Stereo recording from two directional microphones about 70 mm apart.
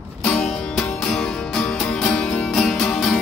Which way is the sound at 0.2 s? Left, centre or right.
Centre.